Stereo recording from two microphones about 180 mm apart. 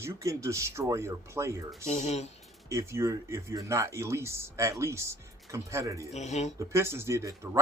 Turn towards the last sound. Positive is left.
turn(degrees=-15)  # may be behind; listen again after turning